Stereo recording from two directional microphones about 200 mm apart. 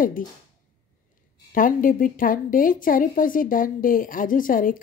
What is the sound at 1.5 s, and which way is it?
A woman's voice, 45° left (ahead or behind).